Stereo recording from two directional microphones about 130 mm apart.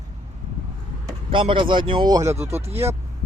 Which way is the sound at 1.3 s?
40° right (ahead or behind).